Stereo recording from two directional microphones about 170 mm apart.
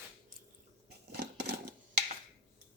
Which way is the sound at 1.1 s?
75° right (ahead or behind).